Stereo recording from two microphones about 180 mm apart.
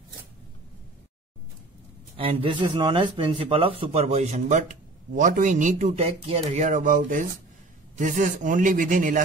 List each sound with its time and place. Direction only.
2.1 s speech: 30° right (ahead or behind)